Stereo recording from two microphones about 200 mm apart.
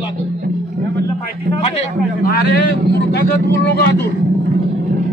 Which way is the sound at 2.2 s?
50° left (ahead or behind).